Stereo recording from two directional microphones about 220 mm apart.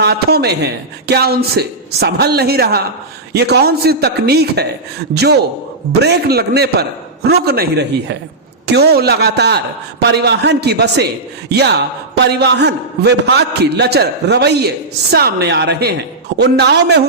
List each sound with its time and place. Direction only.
0.0 s speech: 45° right (ahead or behind)